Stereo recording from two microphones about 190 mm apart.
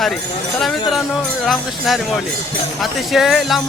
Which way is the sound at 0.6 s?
Centre (ahead or behind).